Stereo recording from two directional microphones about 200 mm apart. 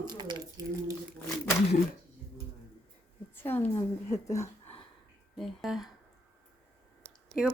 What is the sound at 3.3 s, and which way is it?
A woman's voice, 10° left (ahead or behind).